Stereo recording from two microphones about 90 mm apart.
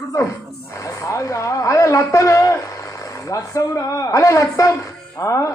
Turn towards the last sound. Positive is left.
turn(degrees=35)  # may be behind; listen again after turning